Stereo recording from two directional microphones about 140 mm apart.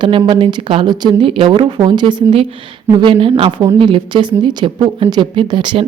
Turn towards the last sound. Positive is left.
turn(degrees=-35)  # may be behind; listen again after turning